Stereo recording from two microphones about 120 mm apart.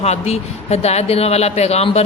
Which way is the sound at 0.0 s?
65° left (ahead or behind).